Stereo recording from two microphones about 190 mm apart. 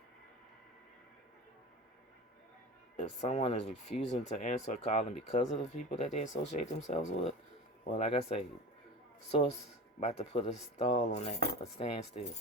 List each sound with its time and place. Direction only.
3.0 s cutlery: 35° left (ahead or behind)
10.0 s cutlery: 35° left (ahead or behind)